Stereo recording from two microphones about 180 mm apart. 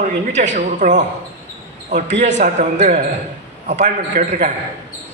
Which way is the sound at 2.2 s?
40° right (ahead or behind).